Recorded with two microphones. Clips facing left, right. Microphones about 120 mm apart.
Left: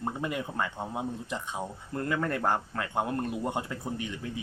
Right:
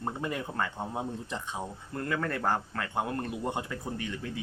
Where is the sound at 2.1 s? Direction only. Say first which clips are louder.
Left 1 dB; 20° left (ahead or behind).